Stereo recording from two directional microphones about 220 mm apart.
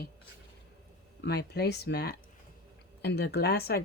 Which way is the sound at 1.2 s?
50° left (ahead or behind).